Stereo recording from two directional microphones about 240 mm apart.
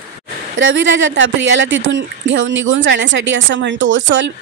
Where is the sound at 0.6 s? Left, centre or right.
Right.